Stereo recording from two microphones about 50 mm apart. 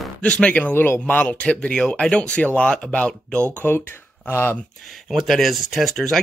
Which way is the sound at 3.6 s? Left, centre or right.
Left.